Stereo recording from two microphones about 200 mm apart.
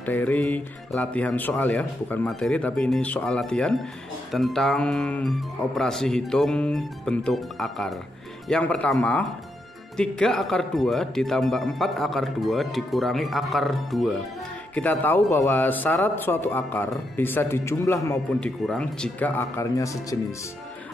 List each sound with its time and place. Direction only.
0.0 s speech: 10° left (ahead or behind)